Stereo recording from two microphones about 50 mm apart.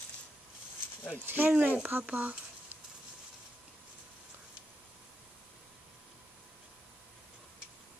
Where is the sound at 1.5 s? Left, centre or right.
Right.